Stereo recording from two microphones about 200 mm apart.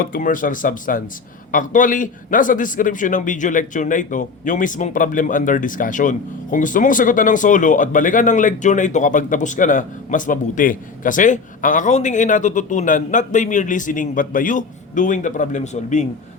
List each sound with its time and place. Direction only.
0.0 s a man's voice: 45° left (ahead or behind)